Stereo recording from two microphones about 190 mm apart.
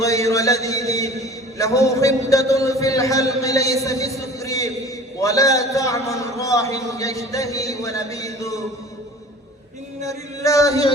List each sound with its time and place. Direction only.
0.0 s a man's voice: 15° left (ahead or behind)
10.0 s a man's voice: 15° left (ahead or behind)